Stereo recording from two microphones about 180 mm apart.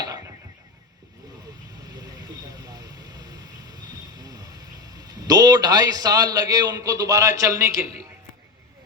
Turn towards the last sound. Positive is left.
turn(degrees=-15)  # may be behind; listen again after turning